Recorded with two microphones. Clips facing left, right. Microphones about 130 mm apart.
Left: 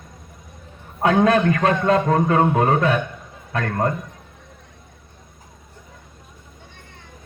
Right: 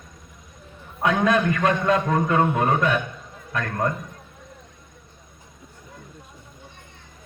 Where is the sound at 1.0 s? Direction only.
30° left (ahead or behind).